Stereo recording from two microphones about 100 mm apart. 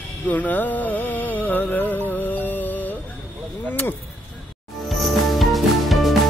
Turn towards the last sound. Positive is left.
turn(degrees=0)  # may be behind; listen again after turning